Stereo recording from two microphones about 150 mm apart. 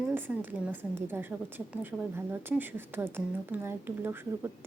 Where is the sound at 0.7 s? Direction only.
15° right (ahead or behind).